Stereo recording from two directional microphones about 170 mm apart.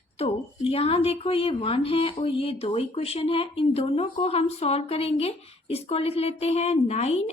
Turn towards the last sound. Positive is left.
turn(degrees=40)  # may be behind; listen again after turning